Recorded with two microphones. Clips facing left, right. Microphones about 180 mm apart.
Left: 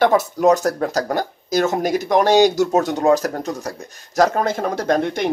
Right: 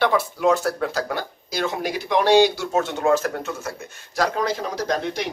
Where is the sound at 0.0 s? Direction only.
45° left (ahead or behind).